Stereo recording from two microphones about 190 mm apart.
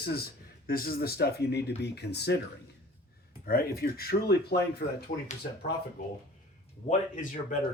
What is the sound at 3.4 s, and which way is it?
Speech, 55° left (ahead or behind).